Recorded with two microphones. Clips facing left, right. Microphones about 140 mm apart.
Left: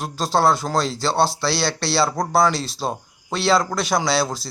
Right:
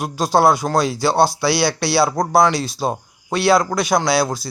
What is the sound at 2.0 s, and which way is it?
Speech, 5° left (ahead or behind).